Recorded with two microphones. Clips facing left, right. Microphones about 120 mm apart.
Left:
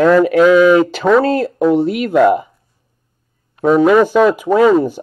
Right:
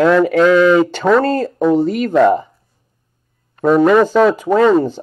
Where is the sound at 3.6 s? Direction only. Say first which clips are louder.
Left 1 dB; centre (ahead or behind).